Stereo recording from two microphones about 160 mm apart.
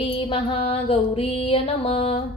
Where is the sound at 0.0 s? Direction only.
35° left (ahead or behind).